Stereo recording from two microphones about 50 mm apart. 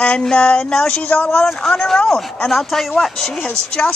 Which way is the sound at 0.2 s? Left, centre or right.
Centre.